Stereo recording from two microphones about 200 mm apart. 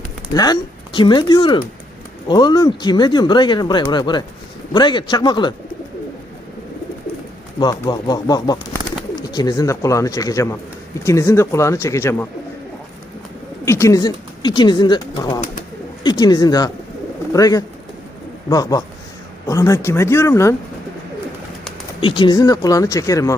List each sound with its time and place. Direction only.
0.3 s speech: 20° left (ahead or behind)
7.6 s speech: 20° left (ahead or behind)
13.7 s speech: 15° left (ahead or behind)
22.0 s speech: 25° left (ahead or behind)